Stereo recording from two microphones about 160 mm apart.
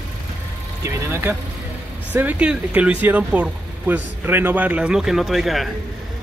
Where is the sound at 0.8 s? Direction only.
15° right (ahead or behind).